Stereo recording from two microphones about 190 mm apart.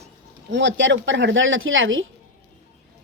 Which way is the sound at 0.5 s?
75° right (ahead or behind).